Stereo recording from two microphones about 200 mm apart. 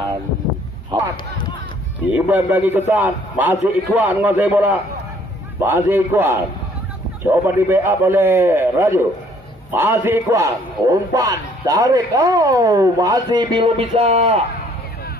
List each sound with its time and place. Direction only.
2.1 s a man's voice: 10° right (ahead or behind); by 14.4 s 30° right (ahead or behind)